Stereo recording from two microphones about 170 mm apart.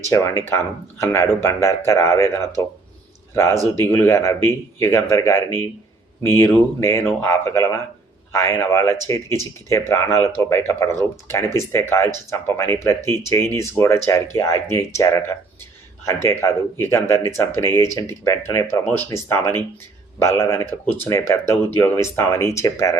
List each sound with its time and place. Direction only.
0.1 s speech: 15° left (ahead or behind)
3.8 s speech: 15° left (ahead or behind)